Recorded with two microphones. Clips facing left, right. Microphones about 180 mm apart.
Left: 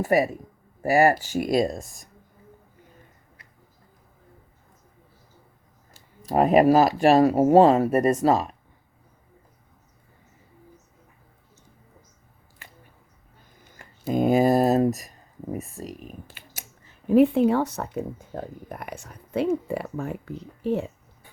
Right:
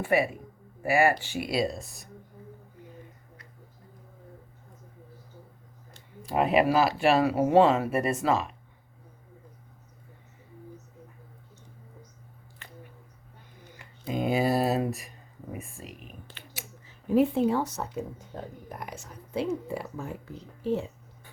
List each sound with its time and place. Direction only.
0.0 s speech: 40° left (ahead or behind)
6.2 s speech: 40° left (ahead or behind)
13.7 s speech: 45° left (ahead or behind)
16.6 s speech: 55° left (ahead or behind)